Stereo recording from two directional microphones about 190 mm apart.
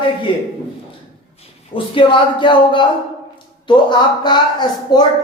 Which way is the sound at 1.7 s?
25° left (ahead or behind).